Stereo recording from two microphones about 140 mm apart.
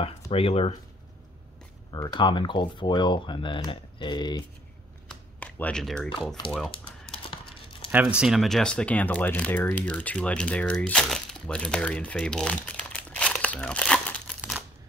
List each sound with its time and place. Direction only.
0.0 s speech: 45° left (ahead or behind)
1.9 s speech: 30° left (ahead or behind)
5.4 s speech: 10° left (ahead or behind)
6.7 s typing: 40° left (ahead or behind)
7.9 s speech: 10° right (ahead or behind); by 14.3 s 10° left (ahead or behind)